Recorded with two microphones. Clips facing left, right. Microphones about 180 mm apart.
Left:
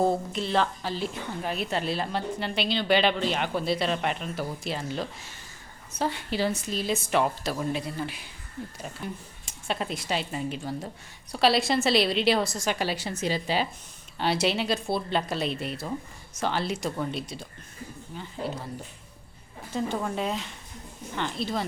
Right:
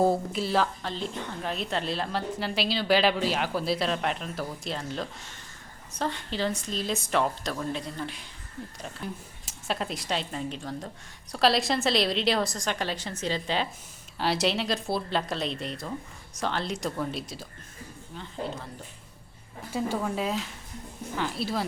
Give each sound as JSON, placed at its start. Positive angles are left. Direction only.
{"t": 0.0, "sound": "a woman's voice", "side_deg": -5}
{"t": 20.0, "sound": "a woman's voice", "side_deg": 0}